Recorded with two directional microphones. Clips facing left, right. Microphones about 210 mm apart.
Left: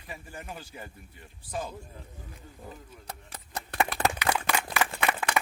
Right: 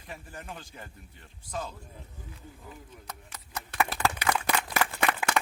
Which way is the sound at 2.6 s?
30° left (ahead or behind).